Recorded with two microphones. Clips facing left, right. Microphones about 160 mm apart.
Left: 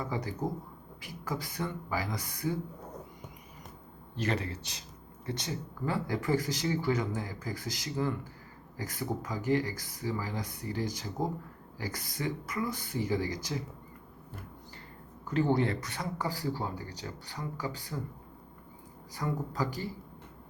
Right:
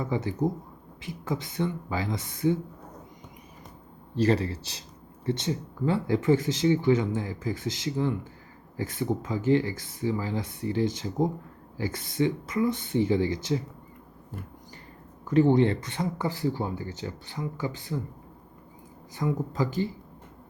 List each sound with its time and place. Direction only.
0.0 s speech: 25° right (ahead or behind)
4.1 s a man's voice: 30° right (ahead or behind)
15.3 s speech: 20° right (ahead or behind)
19.1 s speech: 20° right (ahead or behind)